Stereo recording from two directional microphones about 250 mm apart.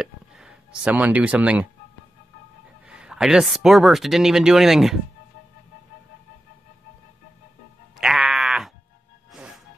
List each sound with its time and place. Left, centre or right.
0.0 s a sound: centre
2.9 s speech: centre
8.0 s sheep: centre
9.3 s music: centre